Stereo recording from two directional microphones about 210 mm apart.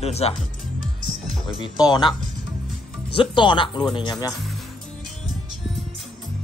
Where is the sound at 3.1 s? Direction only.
25° left (ahead or behind).